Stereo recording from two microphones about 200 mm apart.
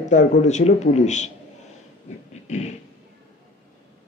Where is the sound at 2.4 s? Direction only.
35° left (ahead or behind).